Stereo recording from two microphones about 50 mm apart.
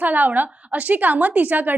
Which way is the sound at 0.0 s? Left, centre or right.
Right.